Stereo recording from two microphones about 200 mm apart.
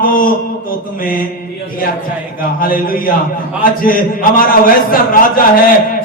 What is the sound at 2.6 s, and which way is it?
A man's voice, 45° left (ahead or behind).